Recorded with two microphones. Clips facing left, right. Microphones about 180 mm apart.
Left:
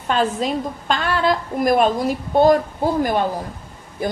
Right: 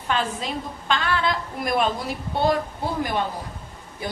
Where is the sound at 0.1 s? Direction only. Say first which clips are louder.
Left 6 dB; 45° left (ahead or behind).